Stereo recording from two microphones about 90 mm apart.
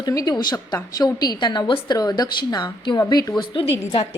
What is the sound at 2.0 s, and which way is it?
A woman's voice, 45° left (ahead or behind).